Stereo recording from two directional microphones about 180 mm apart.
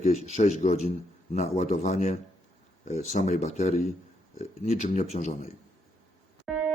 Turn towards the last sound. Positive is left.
turn(degrees=0)  # may be behind; listen again after turning